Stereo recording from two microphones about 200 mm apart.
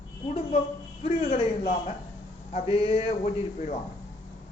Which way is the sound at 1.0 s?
30° left (ahead or behind).